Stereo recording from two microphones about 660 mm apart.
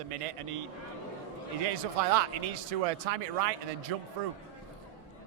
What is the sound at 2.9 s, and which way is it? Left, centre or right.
Speech, right.